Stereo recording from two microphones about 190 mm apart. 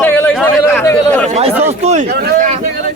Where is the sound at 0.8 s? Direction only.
15° left (ahead or behind).